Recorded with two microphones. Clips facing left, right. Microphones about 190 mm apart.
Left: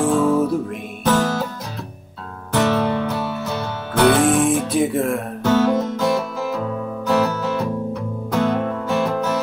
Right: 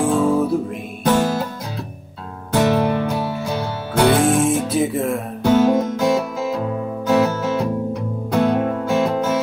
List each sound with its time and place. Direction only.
0.0 s music: 15° right (ahead or behind)
2.5 s music: 15° right (ahead or behind)
4.1 s music: 30° right (ahead or behind)
4.5 s speech: centre (ahead or behind)
5.4 s music: 10° right (ahead or behind)